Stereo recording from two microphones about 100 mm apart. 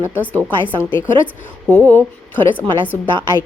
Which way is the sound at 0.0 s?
15° right (ahead or behind).